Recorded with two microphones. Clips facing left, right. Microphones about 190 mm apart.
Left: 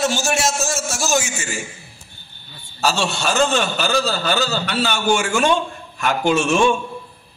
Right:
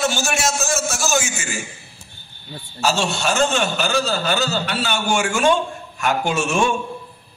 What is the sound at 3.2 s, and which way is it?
A man's voice, 35° left (ahead or behind).